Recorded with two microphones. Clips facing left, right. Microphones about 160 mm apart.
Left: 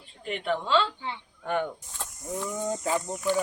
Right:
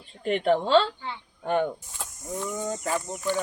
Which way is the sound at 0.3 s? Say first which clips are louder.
Right 6 dB; 40° right (ahead or behind).